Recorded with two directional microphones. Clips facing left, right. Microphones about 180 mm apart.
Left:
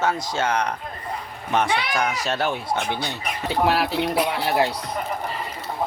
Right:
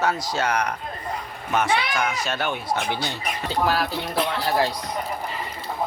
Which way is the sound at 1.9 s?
35° left (ahead or behind).